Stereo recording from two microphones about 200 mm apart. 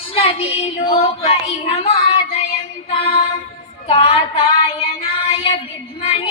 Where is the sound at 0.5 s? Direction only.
30° left (ahead or behind).